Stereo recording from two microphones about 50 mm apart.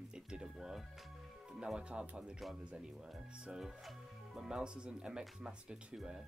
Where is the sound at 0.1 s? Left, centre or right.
Centre.